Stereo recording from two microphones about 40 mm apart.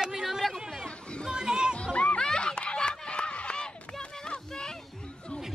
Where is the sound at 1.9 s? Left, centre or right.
Left.